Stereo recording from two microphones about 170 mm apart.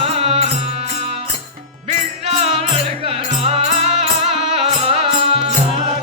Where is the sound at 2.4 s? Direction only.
35° right (ahead or behind).